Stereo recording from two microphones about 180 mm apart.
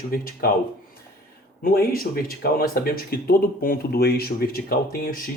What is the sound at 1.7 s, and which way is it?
Speech, 55° left (ahead or behind).